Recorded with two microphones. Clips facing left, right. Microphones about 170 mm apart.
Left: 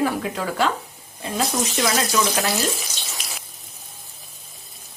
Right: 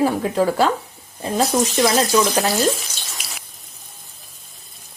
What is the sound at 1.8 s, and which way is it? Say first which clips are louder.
Speech: right 3 dB; 30° right (ahead or behind).